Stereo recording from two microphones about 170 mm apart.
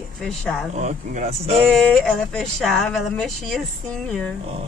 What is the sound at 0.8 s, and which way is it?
Speech, 45° right (ahead or behind).